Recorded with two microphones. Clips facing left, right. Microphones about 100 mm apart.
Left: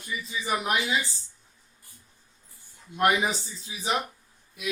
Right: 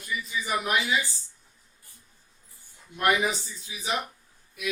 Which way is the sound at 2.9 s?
25° left (ahead or behind).